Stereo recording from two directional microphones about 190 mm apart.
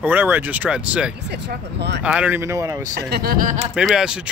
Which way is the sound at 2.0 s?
5° right (ahead or behind).